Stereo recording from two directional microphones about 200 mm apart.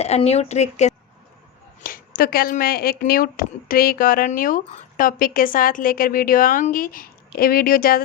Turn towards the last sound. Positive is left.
turn(degrees=45)  # may be behind; listen again after turning